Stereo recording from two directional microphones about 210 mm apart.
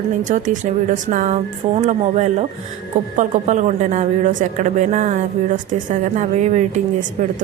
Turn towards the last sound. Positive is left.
turn(degrees=-35)  # may be behind; listen again after turning